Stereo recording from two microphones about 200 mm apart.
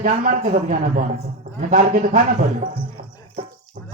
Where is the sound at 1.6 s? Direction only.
40° right (ahead or behind).